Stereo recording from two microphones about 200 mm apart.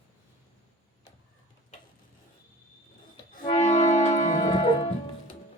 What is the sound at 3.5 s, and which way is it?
Music, 30° left (ahead or behind).